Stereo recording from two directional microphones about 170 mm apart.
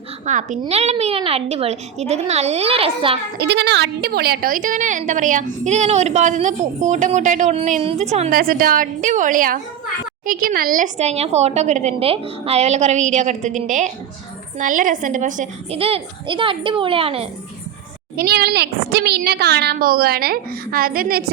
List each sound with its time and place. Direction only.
0.3 s a woman's voice: 45° right (ahead or behind)
3.3 s a woman's voice: 90° right; by 8.0 s 35° right (ahead or behind)
8.3 s a woman's voice: 55° right (ahead or behind)
15.8 s a woman's voice: 30° right (ahead or behind)
18.2 s a woman's voice: 70° right (ahead or behind)
19.7 s a woman's voice: 60° right (ahead or behind)